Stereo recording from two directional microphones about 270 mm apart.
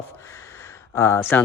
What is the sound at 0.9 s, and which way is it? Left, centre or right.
Speech, centre.